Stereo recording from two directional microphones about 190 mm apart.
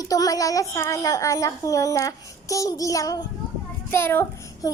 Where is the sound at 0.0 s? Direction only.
20° left (ahead or behind).